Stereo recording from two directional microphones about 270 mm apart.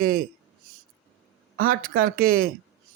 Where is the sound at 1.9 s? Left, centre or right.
Right.